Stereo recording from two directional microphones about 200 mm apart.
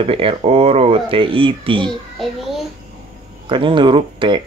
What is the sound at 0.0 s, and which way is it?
Speech, 30° right (ahead or behind).